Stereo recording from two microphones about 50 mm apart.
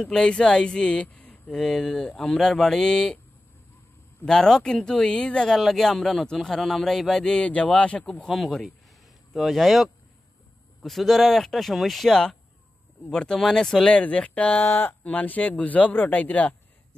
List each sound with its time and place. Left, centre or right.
0.0 s speech: centre
1.0 s a sound: left
1.5 s speech: centre
2.3 s speech: centre
4.3 s speech: centre
5.6 s speech: centre
7.2 s speech: left
8.3 s speech: centre
13.8 s speech: left
14.6 s speech: left